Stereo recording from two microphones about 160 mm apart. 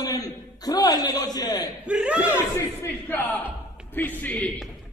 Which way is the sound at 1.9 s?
5° right (ahead or behind).